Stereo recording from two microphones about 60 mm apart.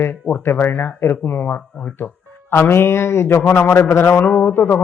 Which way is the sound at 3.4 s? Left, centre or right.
Left.